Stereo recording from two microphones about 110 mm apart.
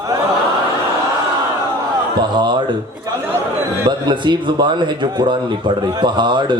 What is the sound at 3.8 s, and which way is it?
Speech, 45° right (ahead or behind).